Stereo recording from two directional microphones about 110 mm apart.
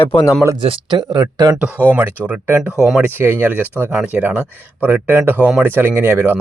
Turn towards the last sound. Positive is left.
turn(degrees=-20)  # may be behind; listen again after turning